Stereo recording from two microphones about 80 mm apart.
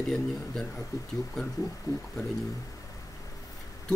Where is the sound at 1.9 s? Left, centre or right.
Left.